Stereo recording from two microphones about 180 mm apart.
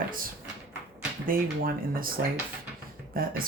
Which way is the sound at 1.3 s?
55° right (ahead or behind).